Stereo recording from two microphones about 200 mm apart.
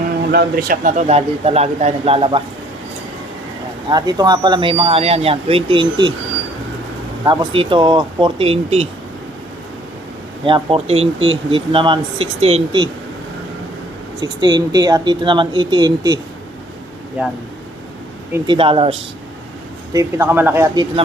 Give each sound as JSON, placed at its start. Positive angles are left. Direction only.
{"t": 0.3, "sound": "a man's voice", "side_deg": -50}
{"t": 3.8, "sound": "speech", "side_deg": -20}
{"t": 7.3, "sound": "speech", "side_deg": -25}
{"t": 10.4, "sound": "speech", "side_deg": -25}
{"t": 14.2, "sound": "speech", "side_deg": -20}
{"t": 17.2, "sound": "speech", "side_deg": -5}
{"t": 18.4, "sound": "speech", "side_deg": -25}
{"t": 19.9, "sound": "speech", "side_deg": -15}